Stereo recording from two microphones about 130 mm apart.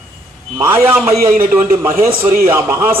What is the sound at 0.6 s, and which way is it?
Speech, 15° right (ahead or behind).